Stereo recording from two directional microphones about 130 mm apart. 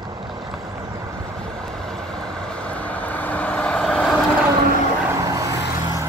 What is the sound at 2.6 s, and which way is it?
Vehicle, 10° left (ahead or behind).